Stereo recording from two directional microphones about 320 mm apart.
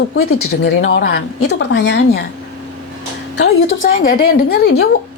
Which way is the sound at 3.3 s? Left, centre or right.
Left.